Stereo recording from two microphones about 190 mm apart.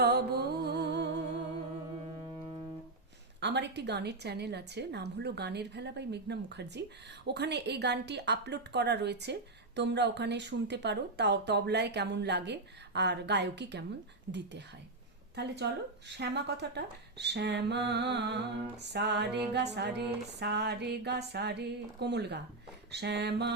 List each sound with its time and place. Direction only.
0.0 s music: 60° right (ahead or behind)
3.4 s speech: 65° right (ahead or behind)
15.4 s speech: 65° right (ahead or behind)